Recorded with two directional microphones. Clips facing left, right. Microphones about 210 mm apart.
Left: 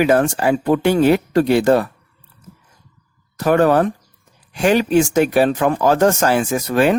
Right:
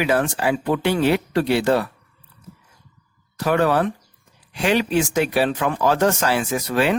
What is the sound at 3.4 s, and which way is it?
Speech, 45° left (ahead or behind).